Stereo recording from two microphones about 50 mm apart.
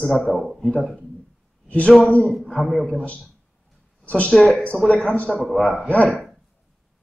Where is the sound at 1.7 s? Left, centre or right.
Left.